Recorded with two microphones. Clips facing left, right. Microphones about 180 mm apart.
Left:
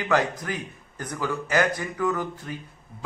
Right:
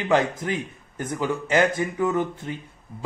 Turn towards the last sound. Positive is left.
turn(degrees=-25)  # may be behind; listen again after turning